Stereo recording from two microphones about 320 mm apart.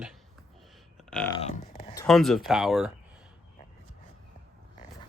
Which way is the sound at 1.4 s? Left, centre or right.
Left.